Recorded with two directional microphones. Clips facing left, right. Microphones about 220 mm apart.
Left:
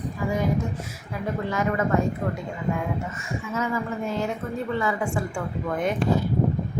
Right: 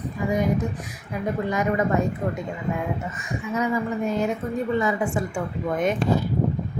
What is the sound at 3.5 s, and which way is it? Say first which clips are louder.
Speech: right 3 dB; 15° right (ahead or behind).